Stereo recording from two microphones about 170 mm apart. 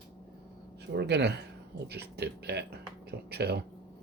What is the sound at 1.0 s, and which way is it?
Speech, 75° right (ahead or behind).